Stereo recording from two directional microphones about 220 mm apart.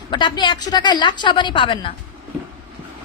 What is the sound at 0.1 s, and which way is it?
Speech, 20° left (ahead or behind).